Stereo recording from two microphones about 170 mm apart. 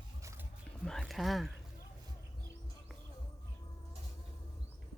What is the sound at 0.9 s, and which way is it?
Speech, centre (ahead or behind).